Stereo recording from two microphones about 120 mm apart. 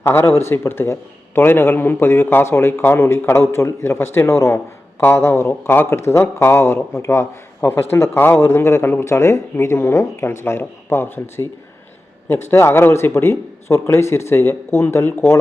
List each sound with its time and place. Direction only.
0.0 s a man's voice: 20° left (ahead or behind)